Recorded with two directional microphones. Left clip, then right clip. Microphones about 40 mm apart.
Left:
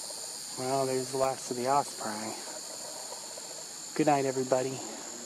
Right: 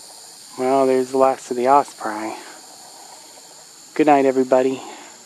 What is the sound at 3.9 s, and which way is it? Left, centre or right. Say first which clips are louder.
Speech: right 12 dB; right.